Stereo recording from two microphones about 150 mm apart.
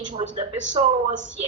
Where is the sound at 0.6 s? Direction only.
50° right (ahead or behind).